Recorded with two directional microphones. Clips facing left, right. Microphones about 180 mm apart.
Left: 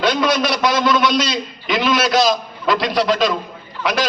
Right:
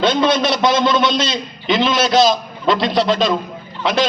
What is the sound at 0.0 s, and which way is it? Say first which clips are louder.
A man's voice: right 2 dB; 25° right (ahead or behind).